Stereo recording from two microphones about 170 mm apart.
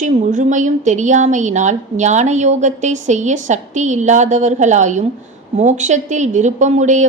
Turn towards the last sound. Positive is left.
turn(degrees=-45)  # may be behind; listen again after turning